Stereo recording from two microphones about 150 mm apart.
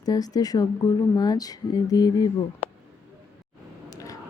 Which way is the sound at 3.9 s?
25° left (ahead or behind).